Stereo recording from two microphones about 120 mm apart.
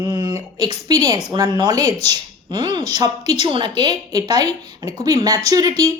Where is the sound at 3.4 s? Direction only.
40° right (ahead or behind).